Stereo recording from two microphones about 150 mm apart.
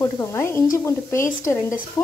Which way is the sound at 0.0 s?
15° left (ahead or behind).